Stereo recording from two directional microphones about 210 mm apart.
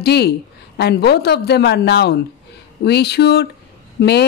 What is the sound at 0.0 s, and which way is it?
A woman's voice, 50° left (ahead or behind).